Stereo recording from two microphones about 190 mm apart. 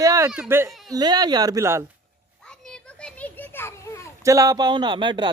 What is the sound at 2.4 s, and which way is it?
Children playing, 5° left (ahead or behind).